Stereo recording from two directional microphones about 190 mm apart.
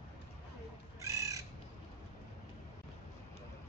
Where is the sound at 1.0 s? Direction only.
15° right (ahead or behind).